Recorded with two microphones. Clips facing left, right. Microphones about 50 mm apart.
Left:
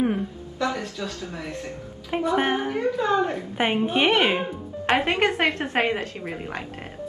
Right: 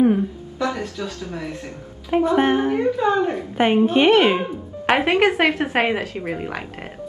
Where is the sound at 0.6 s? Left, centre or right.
Right.